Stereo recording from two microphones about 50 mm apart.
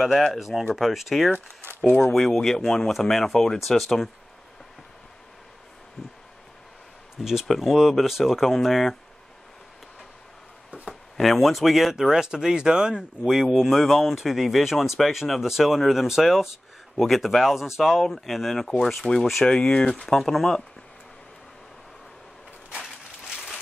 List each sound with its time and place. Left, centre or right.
0.0 s speech: centre
1.3 s speech: right
1.9 s speech: centre
7.2 s speech: centre
11.1 s speech: centre
19.9 s speech: centre
22.7 s a sound: centre